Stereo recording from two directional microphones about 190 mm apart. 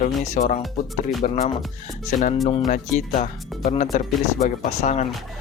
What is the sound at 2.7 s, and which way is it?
Speech, 40° left (ahead or behind).